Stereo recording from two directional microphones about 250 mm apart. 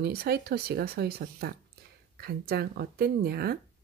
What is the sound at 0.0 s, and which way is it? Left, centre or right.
Speech, right.